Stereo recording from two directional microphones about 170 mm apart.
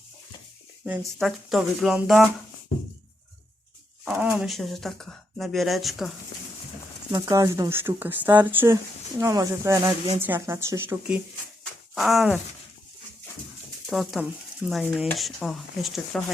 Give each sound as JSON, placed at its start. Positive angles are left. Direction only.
{"t": 1.2, "sound": "speech", "side_deg": 0}
{"t": 4.0, "sound": "speech", "side_deg": -5}
{"t": 7.1, "sound": "speech", "side_deg": -20}
{"t": 13.9, "sound": "speech", "side_deg": 0}